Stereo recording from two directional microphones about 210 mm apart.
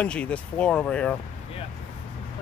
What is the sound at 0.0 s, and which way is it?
Speech, 5° left (ahead or behind).